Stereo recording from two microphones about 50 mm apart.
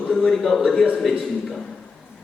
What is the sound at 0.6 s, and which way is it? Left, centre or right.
Speech, centre.